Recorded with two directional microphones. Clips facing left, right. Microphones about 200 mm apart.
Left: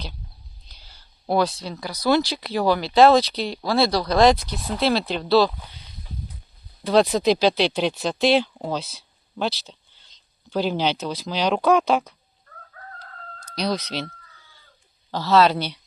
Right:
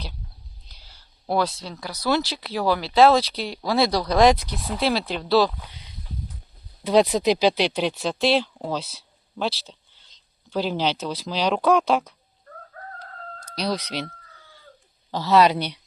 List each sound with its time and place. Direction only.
0.9 s speech: centre (ahead or behind)
7.0 s speech: 10° right (ahead or behind)
12.5 s crowing: 40° right (ahead or behind)
13.6 s speech: 10° right (ahead or behind)
15.1 s speech: 15° right (ahead or behind)